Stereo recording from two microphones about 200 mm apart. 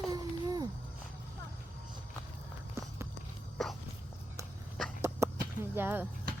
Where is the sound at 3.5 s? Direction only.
Centre (ahead or behind).